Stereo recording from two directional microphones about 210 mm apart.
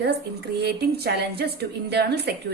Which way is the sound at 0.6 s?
50° right (ahead or behind).